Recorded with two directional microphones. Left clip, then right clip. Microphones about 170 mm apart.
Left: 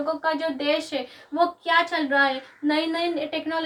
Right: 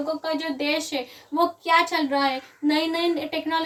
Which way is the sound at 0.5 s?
15° right (ahead or behind).